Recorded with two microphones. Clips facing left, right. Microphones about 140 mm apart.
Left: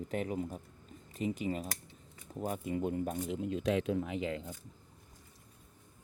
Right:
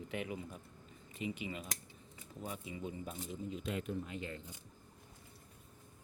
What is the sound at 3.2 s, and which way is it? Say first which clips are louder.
Speech: left 8 dB; 80° left.